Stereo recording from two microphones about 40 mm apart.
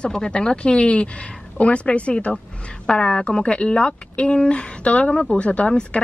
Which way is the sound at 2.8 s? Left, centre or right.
Left.